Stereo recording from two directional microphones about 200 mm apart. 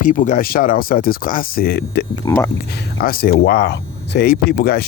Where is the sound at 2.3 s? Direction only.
15° left (ahead or behind).